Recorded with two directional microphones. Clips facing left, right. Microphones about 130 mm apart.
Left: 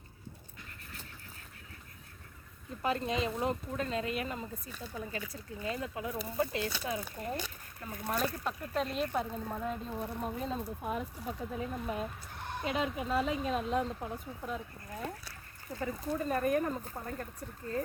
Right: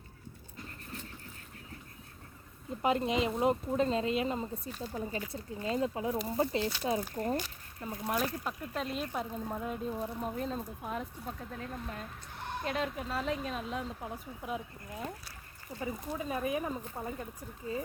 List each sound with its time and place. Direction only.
2.8 s speech: 20° right (ahead or behind); by 7.3 s 35° right (ahead or behind)
7.8 s speech: 20° right (ahead or behind)
8.1 s speech: 5° right (ahead or behind)
15.8 s speech: 10° right (ahead or behind)